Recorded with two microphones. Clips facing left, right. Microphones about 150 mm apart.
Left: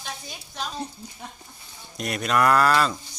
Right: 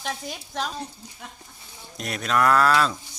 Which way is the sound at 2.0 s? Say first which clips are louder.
Left 1 dB; centre (ahead or behind).